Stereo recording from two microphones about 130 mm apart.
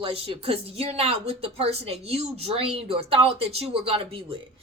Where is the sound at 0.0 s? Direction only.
50° right (ahead or behind).